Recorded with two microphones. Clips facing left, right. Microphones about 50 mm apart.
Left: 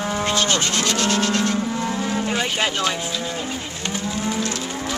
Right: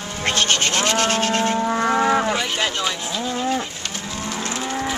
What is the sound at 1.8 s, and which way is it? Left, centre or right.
Livestock, right.